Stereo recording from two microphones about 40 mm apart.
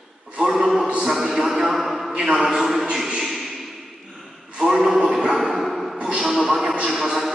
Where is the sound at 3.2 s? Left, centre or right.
Centre.